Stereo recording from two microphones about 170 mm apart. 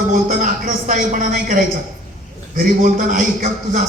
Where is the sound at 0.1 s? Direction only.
50° right (ahead or behind).